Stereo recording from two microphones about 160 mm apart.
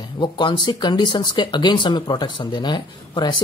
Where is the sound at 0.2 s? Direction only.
30° left (ahead or behind).